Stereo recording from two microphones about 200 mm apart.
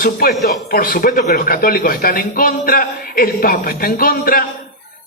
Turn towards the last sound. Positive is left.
turn(degrees=45)  # may be behind; listen again after turning